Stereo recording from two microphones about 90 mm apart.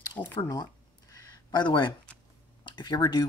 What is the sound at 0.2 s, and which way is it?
Speech, 25° left (ahead or behind).